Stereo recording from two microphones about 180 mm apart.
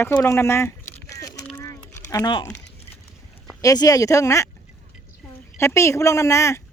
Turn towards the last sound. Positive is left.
turn(degrees=15)  # may be behind; listen again after turning